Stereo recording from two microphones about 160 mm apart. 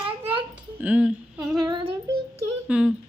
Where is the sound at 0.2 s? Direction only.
35° right (ahead or behind).